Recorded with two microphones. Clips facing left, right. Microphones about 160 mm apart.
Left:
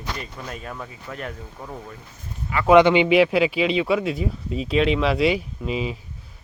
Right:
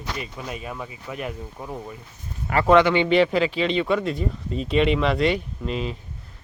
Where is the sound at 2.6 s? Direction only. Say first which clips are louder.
Left 3 dB; 15° left (ahead or behind).